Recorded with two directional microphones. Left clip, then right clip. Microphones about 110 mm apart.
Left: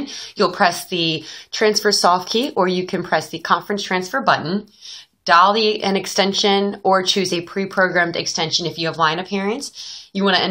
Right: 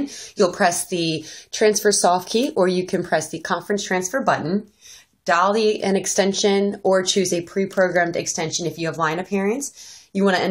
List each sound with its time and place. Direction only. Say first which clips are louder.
0.0 s a woman's voice: left 1 dB; 30° right (ahead or behind)
5.2 s a woman's voice: left 4 dB; 35° right (ahead or behind)